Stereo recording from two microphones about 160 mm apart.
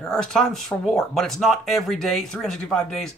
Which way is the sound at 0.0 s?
5° left (ahead or behind).